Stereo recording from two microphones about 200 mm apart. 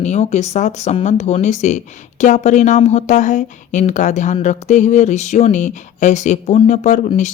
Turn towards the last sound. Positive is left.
turn(degrees=35)  # may be behind; listen again after turning